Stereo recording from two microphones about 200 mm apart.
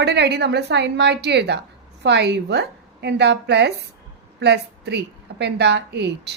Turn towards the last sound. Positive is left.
turn(degrees=-55)  # may be behind; listen again after turning